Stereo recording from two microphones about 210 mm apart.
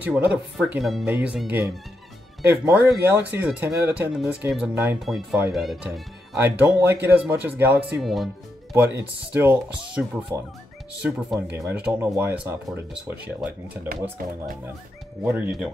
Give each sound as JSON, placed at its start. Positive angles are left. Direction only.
{"t": 0.0, "sound": "speech", "side_deg": -5}
{"t": 9.3, "sound": "speech", "side_deg": -5}
{"t": 14.2, "sound": "speech", "side_deg": -40}
{"t": 15.2, "sound": "speech", "side_deg": -10}